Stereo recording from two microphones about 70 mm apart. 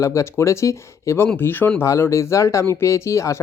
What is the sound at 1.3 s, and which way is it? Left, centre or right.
Speech, left.